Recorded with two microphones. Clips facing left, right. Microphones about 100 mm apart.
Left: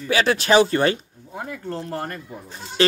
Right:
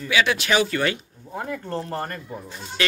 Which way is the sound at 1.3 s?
5° left (ahead or behind).